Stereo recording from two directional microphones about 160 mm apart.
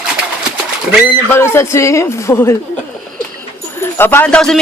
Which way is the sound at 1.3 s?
15° left (ahead or behind).